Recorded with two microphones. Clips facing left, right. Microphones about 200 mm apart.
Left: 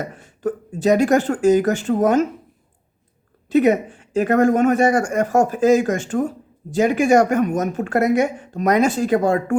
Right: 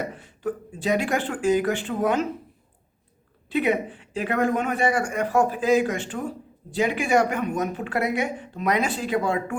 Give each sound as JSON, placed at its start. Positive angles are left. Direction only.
{"t": 0.0, "sound": "speech", "side_deg": 45}
{"t": 3.5, "sound": "speech", "side_deg": 45}